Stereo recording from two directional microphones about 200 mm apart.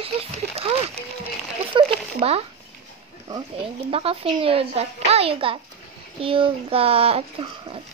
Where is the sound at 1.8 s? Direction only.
25° right (ahead or behind).